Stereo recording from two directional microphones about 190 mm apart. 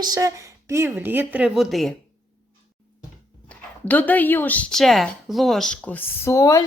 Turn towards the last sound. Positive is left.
turn(degrees=15)  # may be behind; listen again after turning